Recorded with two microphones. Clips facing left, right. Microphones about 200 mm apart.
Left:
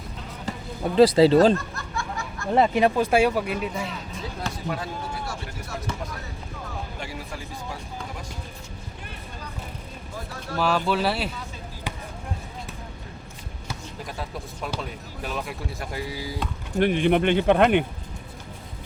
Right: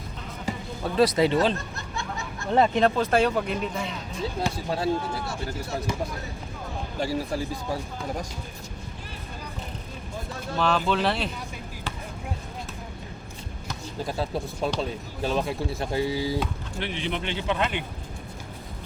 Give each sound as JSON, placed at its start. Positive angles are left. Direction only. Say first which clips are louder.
{"t": 0.5, "sound": "basketball bounce", "louder": "right 2 dB", "side_deg": -10}
{"t": 0.9, "sound": "speech", "louder": "left 6 dB", "side_deg": 30}
{"t": 1.5, "sound": "snicker", "louder": "left 3 dB", "side_deg": -20}
{"t": 2.5, "sound": "speech", "louder": "left 1 dB", "side_deg": 10}
{"t": 4.5, "sound": "speech", "louder": "right 2 dB", "side_deg": -30}
{"t": 7.0, "sound": "speech", "louder": "right 8 dB", "side_deg": -35}
{"t": 10.6, "sound": "speech", "louder": "left 1 dB", "side_deg": 5}
{"t": 14.0, "sound": "speech", "louder": "right 8 dB", "side_deg": -30}
{"t": 16.7, "sound": "speech", "louder": "left 13 dB", "side_deg": 55}